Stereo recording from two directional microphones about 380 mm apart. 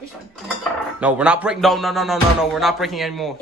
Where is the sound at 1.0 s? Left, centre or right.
Centre.